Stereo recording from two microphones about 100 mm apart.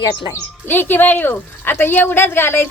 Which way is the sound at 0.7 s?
20° left (ahead or behind).